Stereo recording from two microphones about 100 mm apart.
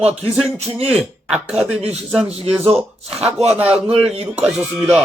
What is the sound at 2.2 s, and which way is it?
Speech, 90° right.